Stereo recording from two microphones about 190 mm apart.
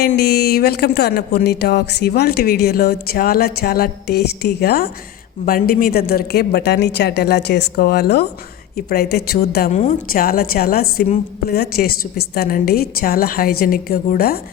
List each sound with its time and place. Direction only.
0.0 s a woman's voice: 55° left (ahead or behind)